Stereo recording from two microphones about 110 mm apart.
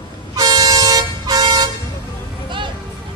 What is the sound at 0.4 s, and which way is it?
Vehicle, 35° right (ahead or behind).